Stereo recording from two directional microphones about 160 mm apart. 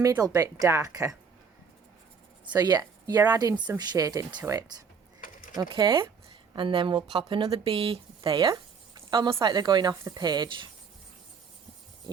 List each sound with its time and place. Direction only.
0.0 s a woman's voice: 20° right (ahead or behind)
2.6 s a woman's voice: 25° right (ahead or behind)
9.0 s a sound: 30° right (ahead or behind)
9.4 s a woman's voice: 25° right (ahead or behind)